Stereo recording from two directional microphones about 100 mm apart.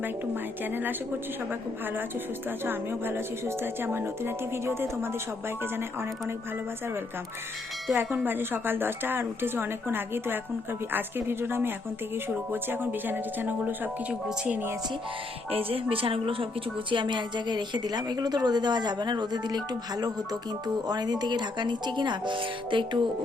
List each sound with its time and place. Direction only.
0.6 s speech: 20° right (ahead or behind)
2.6 s speech: 20° right (ahead or behind)
7.9 s speech: 20° right (ahead or behind)
14.1 s speech: 10° right (ahead or behind)
15.4 s a woman's voice: 70° right (ahead or behind)
16.9 s a woman's voice: 50° right (ahead or behind)